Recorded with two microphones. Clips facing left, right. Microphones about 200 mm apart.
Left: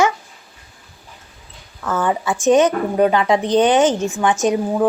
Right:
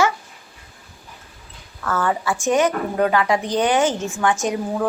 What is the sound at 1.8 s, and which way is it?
A woman's voice, 15° left (ahead or behind).